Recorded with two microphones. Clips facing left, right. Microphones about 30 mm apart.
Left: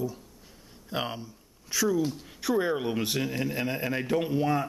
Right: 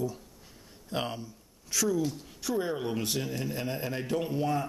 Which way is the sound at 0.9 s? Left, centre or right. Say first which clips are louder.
Left 1 dB; centre.